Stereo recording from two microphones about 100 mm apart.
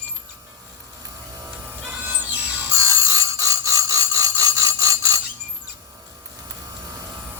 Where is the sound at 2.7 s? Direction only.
35° right (ahead or behind).